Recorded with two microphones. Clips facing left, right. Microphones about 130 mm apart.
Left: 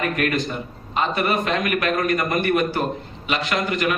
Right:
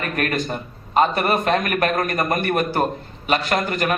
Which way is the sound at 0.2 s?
45° right (ahead or behind).